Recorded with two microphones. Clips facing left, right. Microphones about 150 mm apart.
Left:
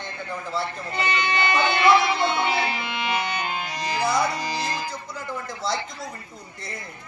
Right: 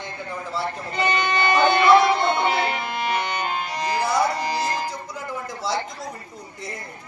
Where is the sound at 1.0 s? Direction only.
45° right (ahead or behind).